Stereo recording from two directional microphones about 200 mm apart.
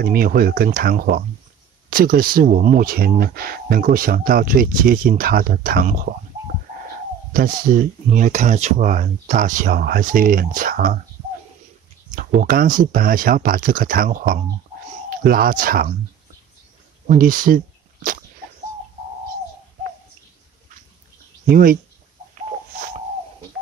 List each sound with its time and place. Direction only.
0.0 s speech: 45° right (ahead or behind)
12.2 s speech: 45° right (ahead or behind)
17.1 s speech: 45° right (ahead or behind)
21.5 s speech: 45° right (ahead or behind)